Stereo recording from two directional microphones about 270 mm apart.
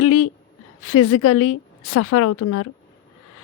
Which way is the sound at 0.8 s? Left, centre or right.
Left.